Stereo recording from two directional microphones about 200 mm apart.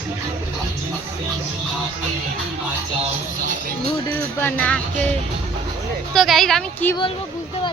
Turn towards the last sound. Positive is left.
turn(degrees=5)  # may be behind; listen again after turning